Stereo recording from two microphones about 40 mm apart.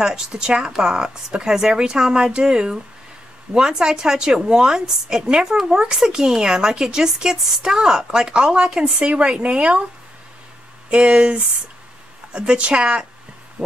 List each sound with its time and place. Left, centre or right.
0.0 s speech: centre
9.0 s a woman's voice: right
10.9 s a woman's voice: right
13.6 s a sound: right